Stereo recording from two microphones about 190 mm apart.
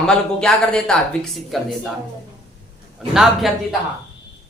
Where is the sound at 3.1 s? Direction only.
Centre (ahead or behind).